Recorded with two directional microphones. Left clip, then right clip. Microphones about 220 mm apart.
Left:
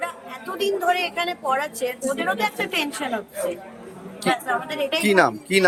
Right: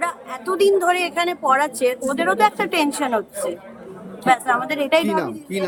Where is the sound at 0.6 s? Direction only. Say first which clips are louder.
Right 4 dB; 15° right (ahead or behind).